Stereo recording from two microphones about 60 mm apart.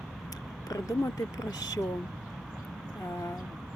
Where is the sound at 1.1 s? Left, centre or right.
Left.